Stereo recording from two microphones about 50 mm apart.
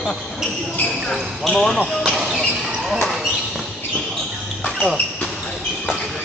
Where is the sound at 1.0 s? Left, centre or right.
Centre.